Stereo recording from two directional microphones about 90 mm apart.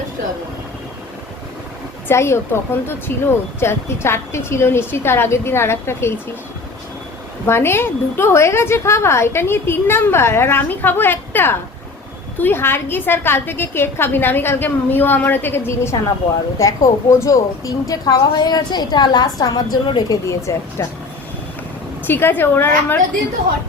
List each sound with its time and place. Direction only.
2.0 s speech: 30° left (ahead or behind)
7.4 s a woman's voice: 25° left (ahead or behind); by 19.6 s 45° left (ahead or behind)
20.1 s speech: 35° left (ahead or behind)
22.0 s speech: 20° left (ahead or behind)